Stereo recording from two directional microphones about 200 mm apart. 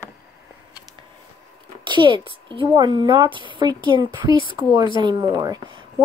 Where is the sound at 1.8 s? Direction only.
25° right (ahead or behind).